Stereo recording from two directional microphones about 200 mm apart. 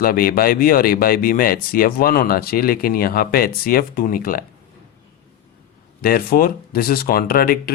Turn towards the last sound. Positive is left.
turn(degrees=45)  # may be behind; listen again after turning